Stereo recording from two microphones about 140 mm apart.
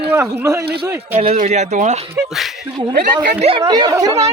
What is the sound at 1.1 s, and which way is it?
Speech, 45° right (ahead or behind).